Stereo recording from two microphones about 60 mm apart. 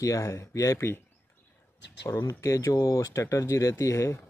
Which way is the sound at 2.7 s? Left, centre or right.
Left.